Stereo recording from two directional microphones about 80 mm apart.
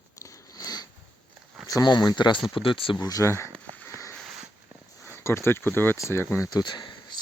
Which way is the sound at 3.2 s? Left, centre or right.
Left.